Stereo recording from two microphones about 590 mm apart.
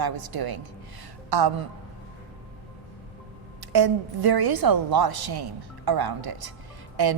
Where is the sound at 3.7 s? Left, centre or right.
Right.